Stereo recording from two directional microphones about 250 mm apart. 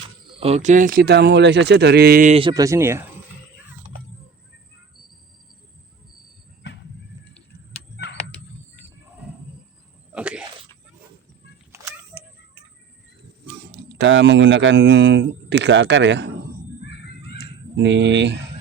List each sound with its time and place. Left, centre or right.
0.3 s speech: right
10.2 s a sound: centre
14.0 s a man's voice: right
17.7 s a man's voice: right